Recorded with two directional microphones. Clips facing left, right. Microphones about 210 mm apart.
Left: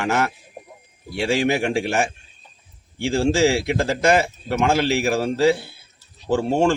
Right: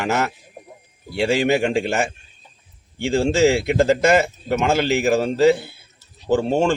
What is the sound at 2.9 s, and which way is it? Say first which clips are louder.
Speech: right 1 dB; centre (ahead or behind).